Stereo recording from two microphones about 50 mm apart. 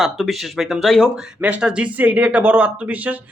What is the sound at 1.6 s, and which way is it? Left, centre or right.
Speech, right.